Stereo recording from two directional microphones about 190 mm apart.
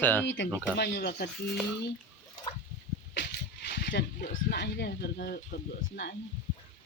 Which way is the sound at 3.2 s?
65° left (ahead or behind).